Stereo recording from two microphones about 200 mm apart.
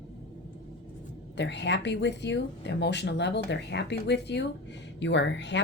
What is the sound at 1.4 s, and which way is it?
Speech, 60° left (ahead or behind).